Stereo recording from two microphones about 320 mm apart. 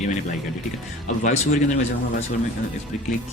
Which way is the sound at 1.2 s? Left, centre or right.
Left.